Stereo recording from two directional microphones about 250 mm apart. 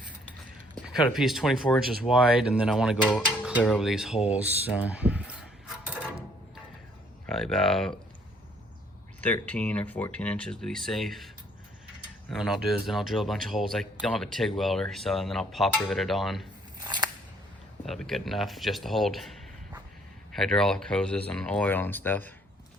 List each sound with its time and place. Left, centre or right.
1.1 s speech: centre
7.3 s speech: centre
9.2 s speech: centre
12.3 s speech: centre
16.8 s scissors: centre
17.8 s speech: centre
20.3 s speech: centre